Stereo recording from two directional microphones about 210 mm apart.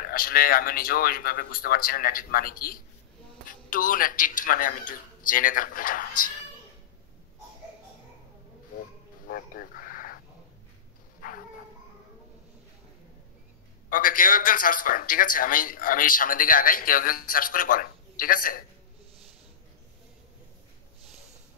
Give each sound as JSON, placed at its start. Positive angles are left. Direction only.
{"t": 0.0, "sound": "a man's voice", "side_deg": 45}
{"t": 9.3, "sound": "a sound", "side_deg": 40}
{"t": 11.1, "sound": "bow-wow", "side_deg": 40}
{"t": 13.8, "sound": "a man's voice", "side_deg": 40}